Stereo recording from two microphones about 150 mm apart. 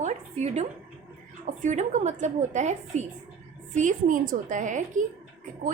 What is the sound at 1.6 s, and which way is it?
A woman's voice, 55° right (ahead or behind).